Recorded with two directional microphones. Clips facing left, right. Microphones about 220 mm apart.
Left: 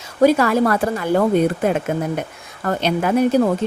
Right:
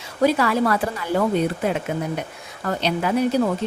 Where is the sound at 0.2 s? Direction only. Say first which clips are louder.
Left 4 dB; 45° left (ahead or behind).